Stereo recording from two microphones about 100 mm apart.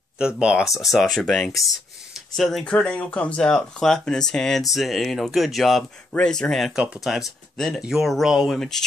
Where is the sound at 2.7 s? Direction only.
15° left (ahead or behind).